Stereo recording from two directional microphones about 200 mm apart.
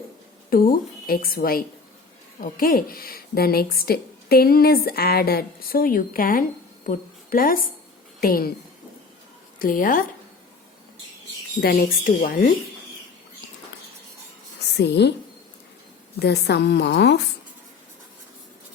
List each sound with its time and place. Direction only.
0.5 s a woman's voice: 45° left (ahead or behind)
9.6 s speech: 45° left (ahead or behind)
11.6 s speech: 50° left (ahead or behind)
14.8 s a woman's voice: 55° left (ahead or behind)
16.2 s a woman's voice: 55° left (ahead or behind)